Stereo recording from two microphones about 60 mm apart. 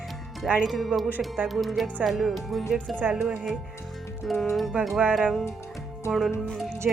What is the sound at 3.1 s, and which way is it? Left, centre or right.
Speech, centre.